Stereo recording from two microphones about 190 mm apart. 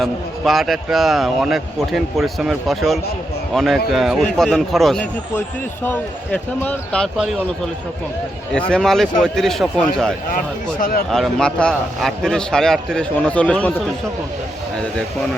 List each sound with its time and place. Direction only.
0.0 s a man's voice: centre (ahead or behind)
8.5 s a man's voice: 5° left (ahead or behind)
10.3 s speech: 45° left (ahead or behind)
11.1 s a man's voice: 5° left (ahead or behind)